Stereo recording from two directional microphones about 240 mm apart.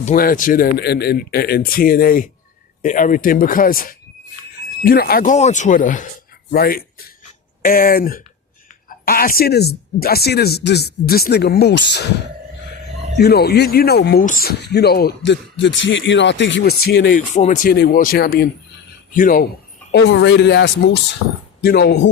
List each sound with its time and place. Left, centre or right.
0.0 s speech: left
13.1 s speech: left
19.9 s speech: left